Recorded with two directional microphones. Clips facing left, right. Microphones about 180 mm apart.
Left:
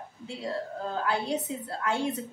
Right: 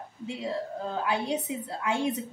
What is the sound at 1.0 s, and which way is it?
A woman's voice, 15° right (ahead or behind).